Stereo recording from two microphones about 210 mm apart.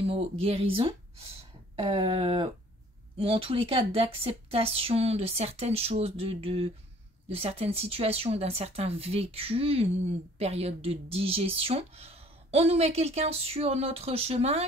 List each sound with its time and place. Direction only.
0.0 s speech: 30° right (ahead or behind)